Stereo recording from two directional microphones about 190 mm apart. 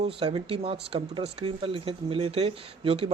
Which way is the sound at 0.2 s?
30° right (ahead or behind).